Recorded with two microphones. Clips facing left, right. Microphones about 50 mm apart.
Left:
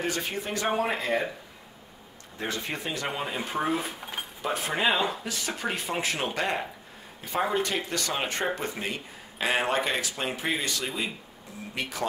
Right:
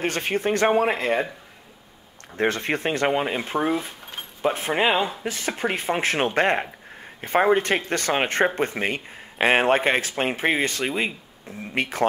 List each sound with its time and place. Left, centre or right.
0.0 s speech: right
2.3 s speech: right
3.7 s speech: centre
4.4 s speech: right